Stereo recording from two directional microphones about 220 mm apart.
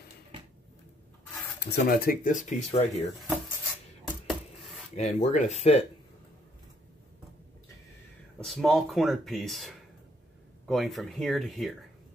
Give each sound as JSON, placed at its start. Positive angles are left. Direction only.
{"t": 1.6, "sound": "speech", "side_deg": 45}
{"t": 4.0, "sound": "a sound", "side_deg": 0}
{"t": 4.9, "sound": "speech", "side_deg": 30}
{"t": 8.4, "sound": "speech", "side_deg": 0}